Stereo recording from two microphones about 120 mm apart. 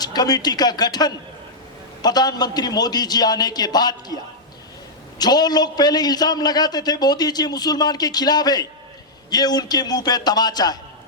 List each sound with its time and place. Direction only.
0.0 s a man's voice: 35° left (ahead or behind)
5.2 s a man's voice: 35° left (ahead or behind)